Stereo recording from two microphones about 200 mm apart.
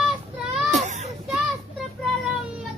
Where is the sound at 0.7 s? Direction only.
35° right (ahead or behind).